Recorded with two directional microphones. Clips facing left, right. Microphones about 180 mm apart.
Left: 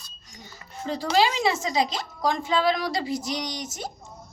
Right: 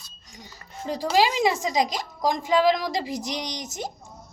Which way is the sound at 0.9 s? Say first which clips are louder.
Right 1 dB; 15° right (ahead or behind).